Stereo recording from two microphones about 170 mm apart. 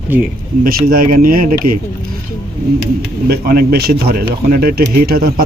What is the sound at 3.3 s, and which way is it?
A man's voice, 65° right (ahead or behind).